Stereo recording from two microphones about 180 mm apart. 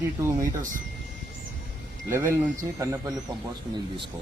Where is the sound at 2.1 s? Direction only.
15° right (ahead or behind).